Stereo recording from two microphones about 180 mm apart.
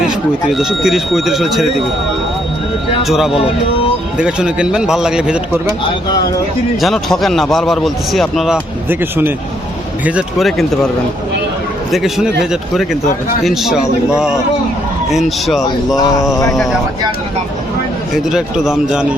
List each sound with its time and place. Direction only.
0.5 s a man's voice: centre (ahead or behind)
3.0 s a man's voice: centre (ahead or behind)
6.8 s a man's voice: centre (ahead or behind)
8.9 s a man's voice: 10° right (ahead or behind)
11.9 s a man's voice: centre (ahead or behind)
16.0 s speech: 20° left (ahead or behind)
18.3 s a man's voice: 5° right (ahead or behind)